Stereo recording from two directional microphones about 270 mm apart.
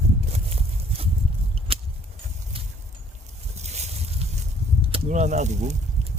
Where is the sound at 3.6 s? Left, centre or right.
Right.